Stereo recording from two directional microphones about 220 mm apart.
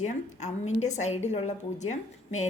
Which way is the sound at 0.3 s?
30° left (ahead or behind).